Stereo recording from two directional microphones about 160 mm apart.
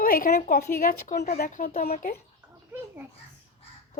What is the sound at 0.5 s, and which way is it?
Speech, 65° left (ahead or behind).